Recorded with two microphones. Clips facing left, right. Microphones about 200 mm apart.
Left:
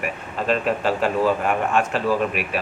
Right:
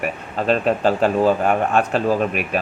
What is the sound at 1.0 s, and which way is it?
Speech, 35° right (ahead or behind).